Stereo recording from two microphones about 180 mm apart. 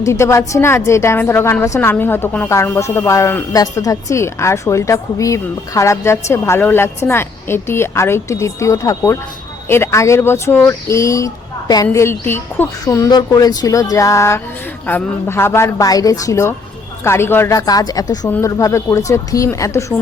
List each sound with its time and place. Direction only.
0.0 s a woman's voice: 15° left (ahead or behind)